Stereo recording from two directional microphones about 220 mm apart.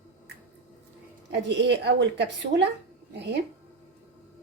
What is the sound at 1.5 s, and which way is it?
Speech, 50° right (ahead or behind).